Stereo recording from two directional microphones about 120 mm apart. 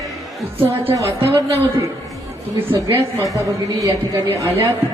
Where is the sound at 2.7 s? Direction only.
25° right (ahead or behind).